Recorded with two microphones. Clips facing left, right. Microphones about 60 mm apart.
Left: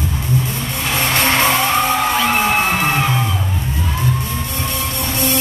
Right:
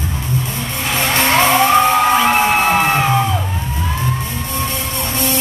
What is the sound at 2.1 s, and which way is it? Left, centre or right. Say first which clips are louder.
Music: right 3 dB; centre.